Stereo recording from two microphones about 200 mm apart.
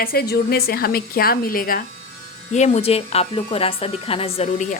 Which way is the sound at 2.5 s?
35° left (ahead or behind).